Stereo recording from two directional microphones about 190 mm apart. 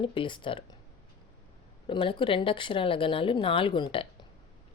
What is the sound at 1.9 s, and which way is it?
Speech, 25° left (ahead or behind).